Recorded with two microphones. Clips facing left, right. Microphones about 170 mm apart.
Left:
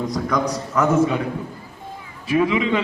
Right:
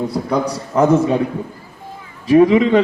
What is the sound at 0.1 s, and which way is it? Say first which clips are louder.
A man's voice: right 3 dB; 30° right (ahead or behind).